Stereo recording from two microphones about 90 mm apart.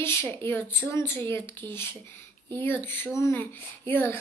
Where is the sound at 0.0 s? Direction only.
30° left (ahead or behind).